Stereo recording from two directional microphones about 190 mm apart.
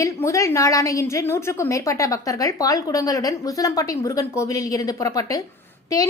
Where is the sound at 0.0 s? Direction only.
15° left (ahead or behind).